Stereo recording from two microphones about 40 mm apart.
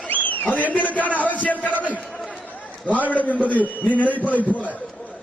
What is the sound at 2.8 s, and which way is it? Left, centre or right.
A man's voice, left.